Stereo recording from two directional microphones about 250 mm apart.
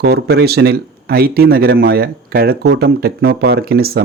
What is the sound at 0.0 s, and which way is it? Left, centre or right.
Speech, right.